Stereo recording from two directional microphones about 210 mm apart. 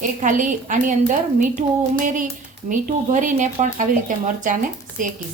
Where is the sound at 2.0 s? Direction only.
40° right (ahead or behind).